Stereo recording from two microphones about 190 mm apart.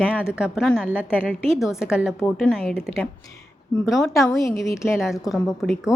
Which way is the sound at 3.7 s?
20° left (ahead or behind).